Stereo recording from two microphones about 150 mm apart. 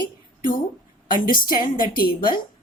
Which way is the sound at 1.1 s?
70° left (ahead or behind).